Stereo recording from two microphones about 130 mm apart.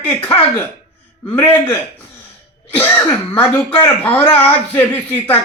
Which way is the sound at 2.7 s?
15° left (ahead or behind).